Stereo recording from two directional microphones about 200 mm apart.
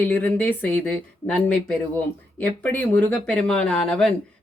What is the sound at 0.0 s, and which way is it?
Speech, 10° left (ahead or behind).